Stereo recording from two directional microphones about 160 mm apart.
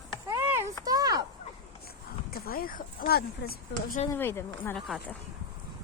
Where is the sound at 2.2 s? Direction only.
70° left (ahead or behind).